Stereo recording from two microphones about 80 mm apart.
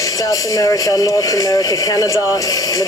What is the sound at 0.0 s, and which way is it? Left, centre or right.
Speech, left.